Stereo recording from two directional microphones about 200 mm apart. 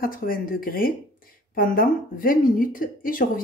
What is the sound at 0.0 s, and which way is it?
Speech, 45° left (ahead or behind).